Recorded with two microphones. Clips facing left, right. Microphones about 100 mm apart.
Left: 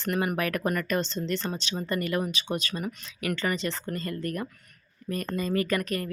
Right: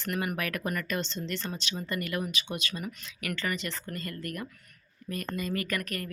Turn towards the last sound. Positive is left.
turn(degrees=25)  # may be behind; listen again after turning